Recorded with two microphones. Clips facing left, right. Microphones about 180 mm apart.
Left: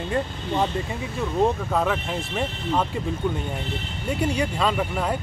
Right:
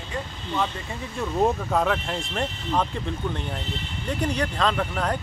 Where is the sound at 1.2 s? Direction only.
Centre (ahead or behind).